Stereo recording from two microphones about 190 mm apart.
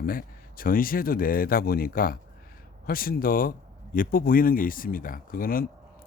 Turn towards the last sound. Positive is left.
turn(degrees=50)  # may be behind; listen again after turning